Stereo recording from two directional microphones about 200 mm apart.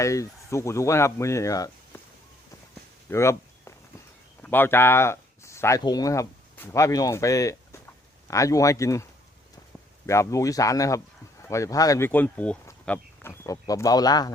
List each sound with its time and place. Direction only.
0.0 s speech: 15° left (ahead or behind)
3.1 s a sound: 15° left (ahead or behind)
4.4 s speech: 10° left (ahead or behind)
10.1 s speech: 15° left (ahead or behind)